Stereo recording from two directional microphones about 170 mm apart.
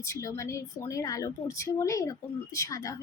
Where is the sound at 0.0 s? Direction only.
15° left (ahead or behind).